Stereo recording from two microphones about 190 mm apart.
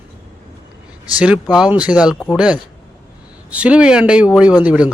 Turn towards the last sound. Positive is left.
turn(degrees=-5)  # may be behind; listen again after turning